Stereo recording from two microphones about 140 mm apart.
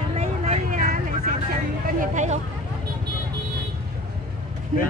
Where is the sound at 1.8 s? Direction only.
60° right (ahead or behind).